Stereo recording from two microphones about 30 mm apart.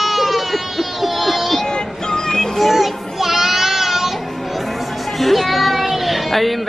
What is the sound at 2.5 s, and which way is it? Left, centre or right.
Child singing, centre.